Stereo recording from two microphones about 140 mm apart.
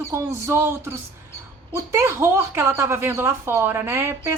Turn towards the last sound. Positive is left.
turn(degrees=-20)  # may be behind; listen again after turning